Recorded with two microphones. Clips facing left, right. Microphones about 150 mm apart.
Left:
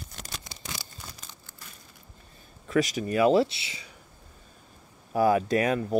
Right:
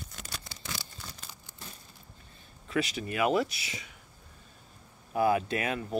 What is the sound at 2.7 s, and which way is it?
Speech, 40° left (ahead or behind).